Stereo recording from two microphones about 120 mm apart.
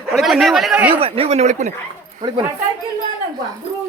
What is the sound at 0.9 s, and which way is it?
Speech, 50° right (ahead or behind).